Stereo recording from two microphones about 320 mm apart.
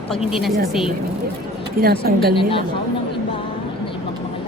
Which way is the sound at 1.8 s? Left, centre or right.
Right.